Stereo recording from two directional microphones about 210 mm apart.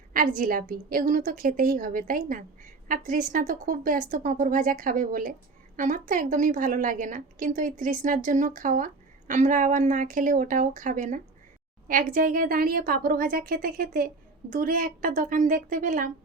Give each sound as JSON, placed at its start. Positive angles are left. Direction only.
{"t": 0.1, "sound": "a woman's voice", "side_deg": -40}